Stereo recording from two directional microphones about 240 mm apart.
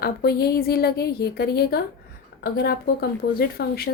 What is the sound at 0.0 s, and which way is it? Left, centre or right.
A woman's voice, left.